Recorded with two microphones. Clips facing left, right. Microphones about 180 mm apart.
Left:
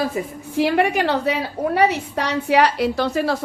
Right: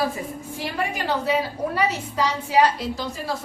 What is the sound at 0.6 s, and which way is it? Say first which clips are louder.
A woman's voice: left 11 dB; 70° left (ahead or behind).